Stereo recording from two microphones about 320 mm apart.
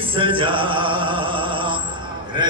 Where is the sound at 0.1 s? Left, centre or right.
Centre.